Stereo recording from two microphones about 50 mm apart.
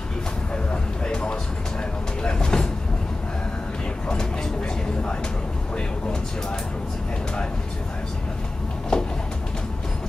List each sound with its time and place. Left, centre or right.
1.0 s music: centre
2.2 s vehicle: centre
8.9 s a sound: centre